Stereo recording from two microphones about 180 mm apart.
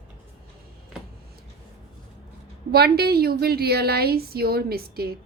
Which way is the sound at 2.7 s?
60° right (ahead or behind).